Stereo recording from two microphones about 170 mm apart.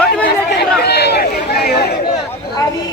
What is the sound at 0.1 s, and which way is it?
Chatter, 75° left (ahead or behind).